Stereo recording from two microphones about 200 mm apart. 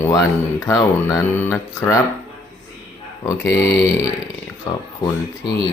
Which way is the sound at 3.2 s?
15° left (ahead or behind).